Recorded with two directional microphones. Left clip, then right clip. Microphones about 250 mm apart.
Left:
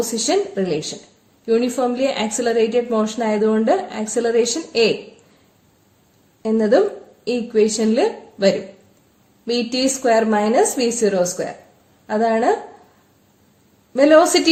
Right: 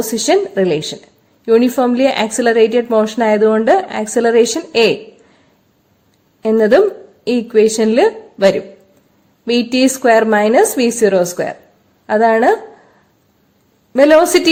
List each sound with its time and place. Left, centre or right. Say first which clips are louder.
0.2 s a woman's voice: right 8 dB; right
6.4 s a woman's voice: right 6 dB; right
13.9 s a woman's voice: right 3 dB; right